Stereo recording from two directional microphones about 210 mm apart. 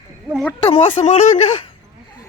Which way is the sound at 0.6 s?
30° left (ahead or behind).